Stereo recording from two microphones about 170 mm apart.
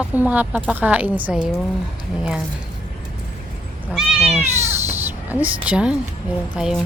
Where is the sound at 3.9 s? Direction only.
Centre (ahead or behind).